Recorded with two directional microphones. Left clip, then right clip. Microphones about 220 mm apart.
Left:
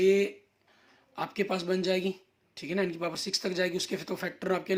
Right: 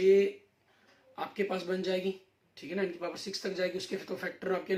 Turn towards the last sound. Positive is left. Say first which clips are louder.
# left 2 dB
turn(degrees=45)  # may be behind; listen again after turning